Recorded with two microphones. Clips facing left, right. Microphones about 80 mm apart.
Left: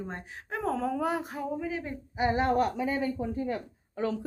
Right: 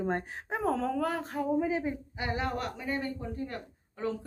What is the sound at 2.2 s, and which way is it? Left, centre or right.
Speech, left.